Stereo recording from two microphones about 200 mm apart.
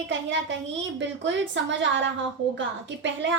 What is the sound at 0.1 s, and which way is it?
A woman's voice, 65° right (ahead or behind).